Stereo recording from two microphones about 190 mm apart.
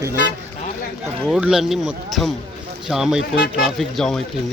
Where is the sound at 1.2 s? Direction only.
Centre (ahead or behind).